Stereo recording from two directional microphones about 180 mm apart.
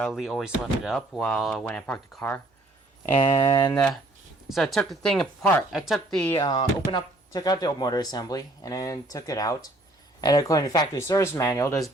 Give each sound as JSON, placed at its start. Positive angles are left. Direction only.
{"t": 0.0, "sound": "speech", "side_deg": 0}
{"t": 4.4, "sound": "speech", "side_deg": 0}
{"t": 6.4, "sound": "speech", "side_deg": 25}